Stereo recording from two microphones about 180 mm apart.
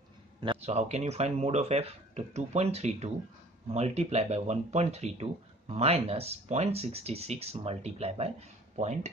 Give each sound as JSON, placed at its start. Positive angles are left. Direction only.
{"t": 0.4, "sound": "speech", "side_deg": -30}